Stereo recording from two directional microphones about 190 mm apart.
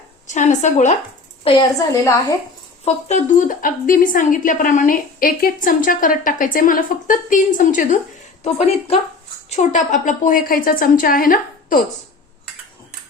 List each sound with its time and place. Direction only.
0.3 s a woman's voice: 40° left (ahead or behind)
1.5 s a woman's voice: 20° left (ahead or behind)
2.8 s a woman's voice: 40° left (ahead or behind)